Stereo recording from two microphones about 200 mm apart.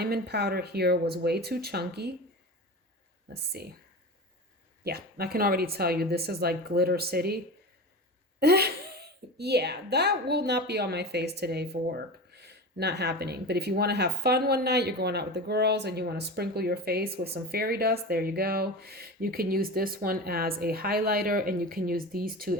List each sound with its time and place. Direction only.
0.0 s speech: 55° right (ahead or behind)
3.3 s speech: 55° right (ahead or behind)
4.8 s speech: 50° right (ahead or behind)